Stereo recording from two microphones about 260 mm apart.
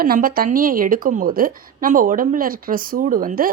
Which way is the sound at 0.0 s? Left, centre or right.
Right.